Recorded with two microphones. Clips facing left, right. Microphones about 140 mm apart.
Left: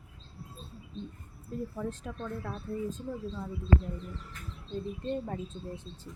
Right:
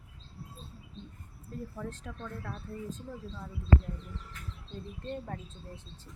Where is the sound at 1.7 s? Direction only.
15° left (ahead or behind).